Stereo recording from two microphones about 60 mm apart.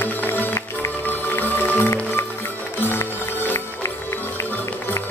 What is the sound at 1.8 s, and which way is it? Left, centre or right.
Music, left.